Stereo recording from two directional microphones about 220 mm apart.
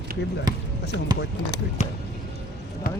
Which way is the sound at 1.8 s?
30° left (ahead or behind).